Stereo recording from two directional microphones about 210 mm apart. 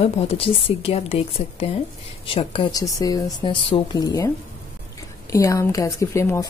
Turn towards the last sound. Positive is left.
turn(degrees=15)  # may be behind; listen again after turning